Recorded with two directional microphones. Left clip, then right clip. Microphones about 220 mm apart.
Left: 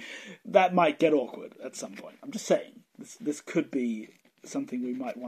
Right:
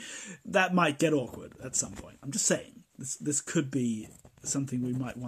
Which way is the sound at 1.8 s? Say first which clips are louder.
Even; 20° right (ahead or behind).